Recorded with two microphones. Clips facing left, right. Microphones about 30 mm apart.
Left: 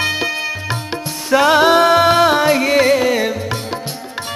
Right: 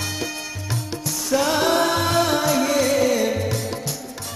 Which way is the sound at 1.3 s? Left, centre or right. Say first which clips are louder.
Left 8 dB; left.